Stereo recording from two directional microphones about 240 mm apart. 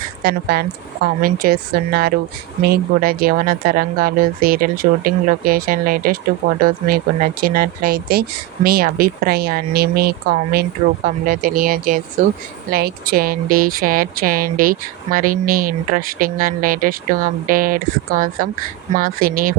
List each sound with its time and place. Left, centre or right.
0.2 s speech: right